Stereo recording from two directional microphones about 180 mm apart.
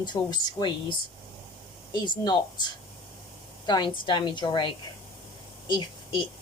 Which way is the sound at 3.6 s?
25° left (ahead or behind).